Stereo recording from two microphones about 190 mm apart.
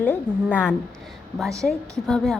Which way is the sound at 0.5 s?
10° left (ahead or behind).